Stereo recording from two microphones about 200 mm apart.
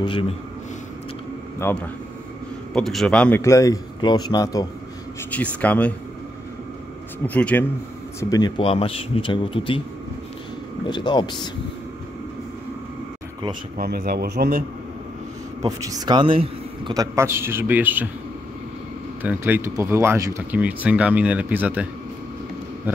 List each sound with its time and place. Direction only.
1.6 s a man's voice: 10° left (ahead or behind)
5.3 s a man's voice: 5° left (ahead or behind)
7.2 s a man's voice: 5° left (ahead or behind)
8.2 s speech: 20° left (ahead or behind)
10.9 s speech: 20° left (ahead or behind)
13.7 s speech: 50° right (ahead or behind)
15.6 s speech: 15° right (ahead or behind)
19.2 s speech: 10° right (ahead or behind)
22.9 s speech: 10° right (ahead or behind)